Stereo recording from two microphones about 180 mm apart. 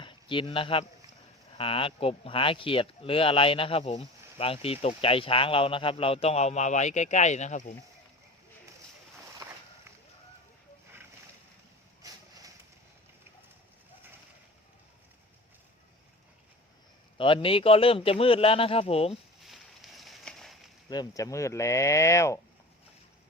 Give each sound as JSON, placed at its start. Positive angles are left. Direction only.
{"t": 0.0, "sound": "speech", "side_deg": 25}
{"t": 17.2, "sound": "speech", "side_deg": 30}
{"t": 19.5, "sound": "a sound", "side_deg": 0}
{"t": 20.9, "sound": "speech", "side_deg": 20}